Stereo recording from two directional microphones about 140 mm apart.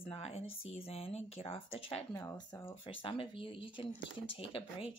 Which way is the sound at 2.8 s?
40° left (ahead or behind).